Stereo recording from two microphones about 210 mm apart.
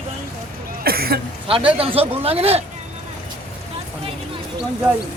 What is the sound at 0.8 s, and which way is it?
Cough, 45° right (ahead or behind).